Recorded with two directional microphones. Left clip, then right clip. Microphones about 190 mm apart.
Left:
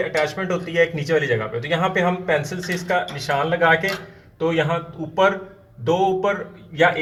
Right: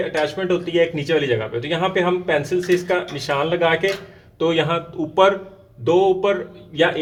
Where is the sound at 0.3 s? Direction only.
35° right (ahead or behind).